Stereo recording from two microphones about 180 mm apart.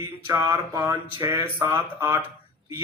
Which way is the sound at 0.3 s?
15° right (ahead or behind).